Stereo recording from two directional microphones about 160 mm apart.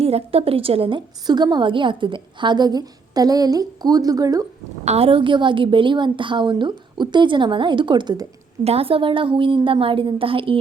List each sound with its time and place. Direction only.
0.0 s a woman's voice: 40° right (ahead or behind); by 4.4 s 20° right (ahead or behind)
4.9 s a woman's voice: 35° right (ahead or behind)
8.6 s a woman's voice: 40° right (ahead or behind)